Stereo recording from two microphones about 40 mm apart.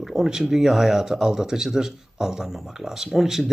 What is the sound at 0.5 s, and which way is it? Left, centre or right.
Speech, centre.